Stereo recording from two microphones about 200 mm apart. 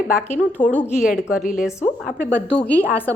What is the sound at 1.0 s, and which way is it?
Speech, 5° right (ahead or behind).